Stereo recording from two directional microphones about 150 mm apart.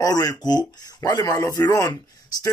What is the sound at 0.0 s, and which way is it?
Speech, 25° left (ahead or behind).